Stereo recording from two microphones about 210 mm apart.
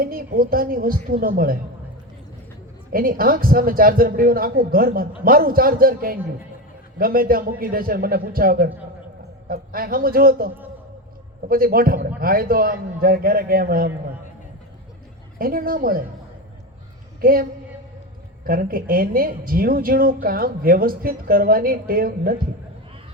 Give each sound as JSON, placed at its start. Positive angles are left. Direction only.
{"t": 0.0, "sound": "speech", "side_deg": -45}
{"t": 2.9, "sound": "speech", "side_deg": -45}
{"t": 15.4, "sound": "speech", "side_deg": -45}
{"t": 17.2, "sound": "a woman's voice", "side_deg": -45}
{"t": 18.4, "sound": "speech", "side_deg": -45}